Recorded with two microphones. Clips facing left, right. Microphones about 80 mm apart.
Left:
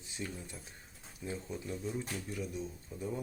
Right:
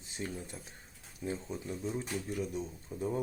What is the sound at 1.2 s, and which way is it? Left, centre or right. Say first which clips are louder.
Speech: right 3 dB; right.